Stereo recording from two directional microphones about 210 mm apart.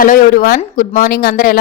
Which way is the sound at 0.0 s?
40° left (ahead or behind).